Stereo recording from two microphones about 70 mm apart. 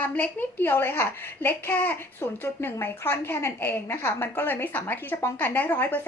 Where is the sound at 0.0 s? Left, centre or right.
Left.